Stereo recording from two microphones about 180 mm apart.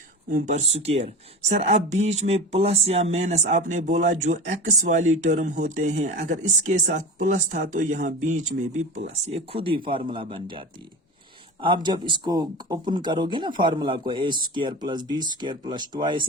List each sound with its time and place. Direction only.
0.3 s speech: 45° right (ahead or behind)
11.6 s speech: 25° right (ahead or behind)